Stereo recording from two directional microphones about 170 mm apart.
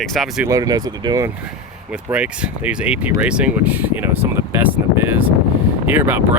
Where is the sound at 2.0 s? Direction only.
5° right (ahead or behind).